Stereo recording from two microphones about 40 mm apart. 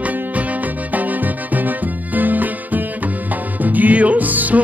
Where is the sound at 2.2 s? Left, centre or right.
Right.